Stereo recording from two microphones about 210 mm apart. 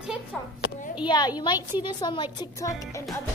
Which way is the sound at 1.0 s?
20° left (ahead or behind).